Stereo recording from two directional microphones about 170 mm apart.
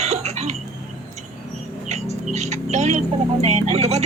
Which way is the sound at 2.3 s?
40° right (ahead or behind).